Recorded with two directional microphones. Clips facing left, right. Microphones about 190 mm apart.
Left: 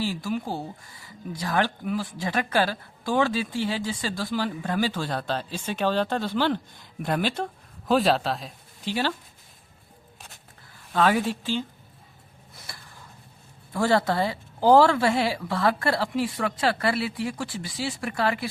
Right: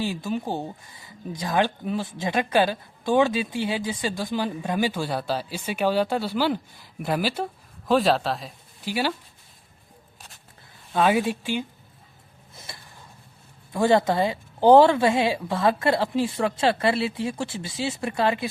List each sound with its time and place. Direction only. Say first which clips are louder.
0.0 s speech: right 1 dB; 20° right (ahead or behind)
10.9 s speech: right 1 dB; 15° right (ahead or behind)
13.7 s speech: right 3 dB; 20° right (ahead or behind)